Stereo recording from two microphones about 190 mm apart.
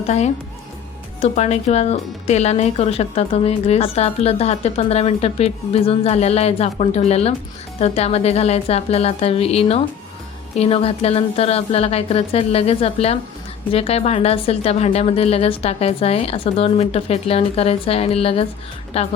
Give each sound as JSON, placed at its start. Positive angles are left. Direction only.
{"t": 1.2, "sound": "speech", "side_deg": 35}